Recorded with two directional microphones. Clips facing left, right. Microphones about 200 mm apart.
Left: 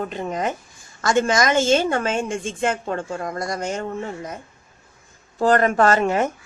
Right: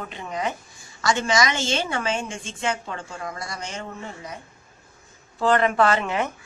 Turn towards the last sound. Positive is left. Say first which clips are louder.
# left 5 dB
turn(degrees=45)  # may be behind; listen again after turning